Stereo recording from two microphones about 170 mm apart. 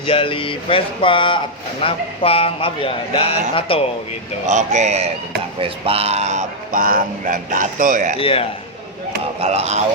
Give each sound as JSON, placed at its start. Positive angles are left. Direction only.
{"t": 0.1, "sound": "a man's voice", "side_deg": 30}
{"t": 4.4, "sound": "speech", "side_deg": -45}
{"t": 8.2, "sound": "a man's voice", "side_deg": 30}
{"t": 9.4, "sound": "speech", "side_deg": -40}